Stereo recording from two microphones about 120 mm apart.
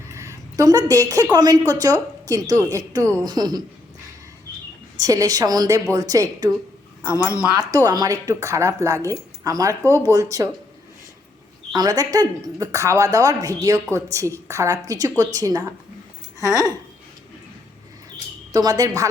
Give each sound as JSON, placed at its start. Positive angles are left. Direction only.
{"t": 0.1, "sound": "a sound", "side_deg": -25}
{"t": 1.3, "sound": "a woman's voice", "side_deg": -30}
{"t": 4.9, "sound": "a woman's voice", "side_deg": -30}
{"t": 7.0, "sound": "a woman's voice", "side_deg": 25}
{"t": 7.6, "sound": "a woman's voice", "side_deg": -30}
{"t": 11.7, "sound": "a woman's voice", "side_deg": -35}
{"t": 16.4, "sound": "a woman's voice", "side_deg": 25}
{"t": 18.5, "sound": "a woman's voice", "side_deg": -30}